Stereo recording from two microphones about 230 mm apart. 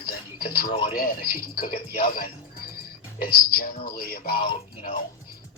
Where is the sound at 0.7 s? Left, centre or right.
Left.